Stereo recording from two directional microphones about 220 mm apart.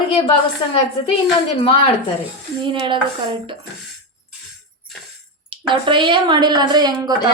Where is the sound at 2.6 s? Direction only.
20° right (ahead or behind).